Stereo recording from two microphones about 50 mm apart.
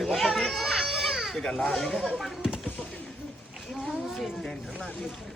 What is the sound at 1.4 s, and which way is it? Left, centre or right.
Speech, centre.